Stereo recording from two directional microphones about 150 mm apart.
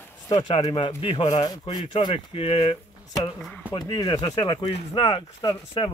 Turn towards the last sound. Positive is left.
turn(degrees=30)  # may be behind; listen again after turning